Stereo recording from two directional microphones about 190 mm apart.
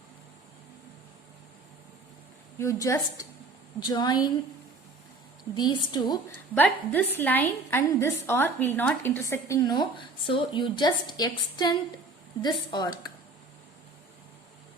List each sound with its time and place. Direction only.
2.6 s a woman's voice: 15° left (ahead or behind)
5.5 s a woman's voice: 20° left (ahead or behind)
6.5 s a woman's voice: 10° left (ahead or behind)